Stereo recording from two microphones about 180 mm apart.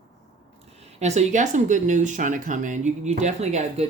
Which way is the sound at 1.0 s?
40° right (ahead or behind).